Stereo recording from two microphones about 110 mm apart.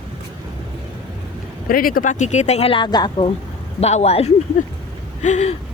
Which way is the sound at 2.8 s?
40° left (ahead or behind).